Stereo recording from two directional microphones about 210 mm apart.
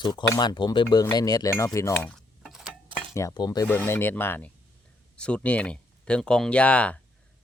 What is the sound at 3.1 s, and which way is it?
Speech, 15° left (ahead or behind).